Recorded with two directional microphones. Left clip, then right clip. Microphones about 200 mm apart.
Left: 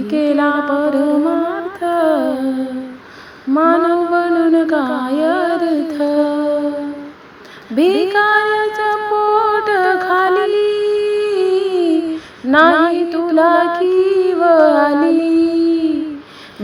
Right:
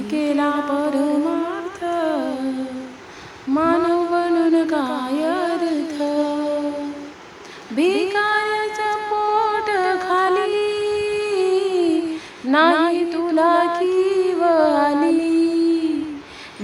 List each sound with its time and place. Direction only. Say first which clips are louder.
0.1 s music: left 5 dB; 20° left (ahead or behind)
3.5 s child singing: left 5 dB; 20° left (ahead or behind)
7.8 s music: left 6 dB; 20° left (ahead or behind)